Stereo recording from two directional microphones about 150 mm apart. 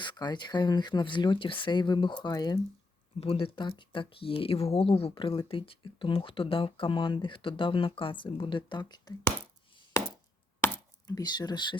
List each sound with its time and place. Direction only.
0.0 s speech: 30° left (ahead or behind)
3.2 s speech: 40° left (ahead or behind)
10.6 s chopping: 25° left (ahead or behind)